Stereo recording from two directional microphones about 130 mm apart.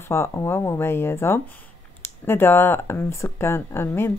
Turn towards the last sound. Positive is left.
turn(degrees=20)  # may be behind; listen again after turning